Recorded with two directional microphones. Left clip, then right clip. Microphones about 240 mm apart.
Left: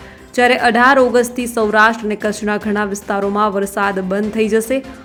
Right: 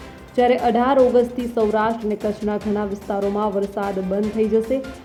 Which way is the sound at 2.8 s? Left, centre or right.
Left.